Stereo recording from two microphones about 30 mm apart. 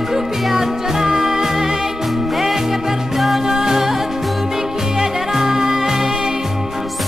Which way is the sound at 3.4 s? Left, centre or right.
Centre.